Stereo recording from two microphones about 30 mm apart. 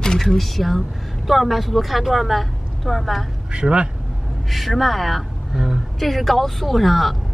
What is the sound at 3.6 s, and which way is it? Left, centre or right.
Speech, right.